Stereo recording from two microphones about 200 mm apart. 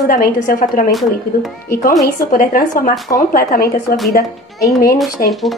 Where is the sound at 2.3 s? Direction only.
45° left (ahead or behind).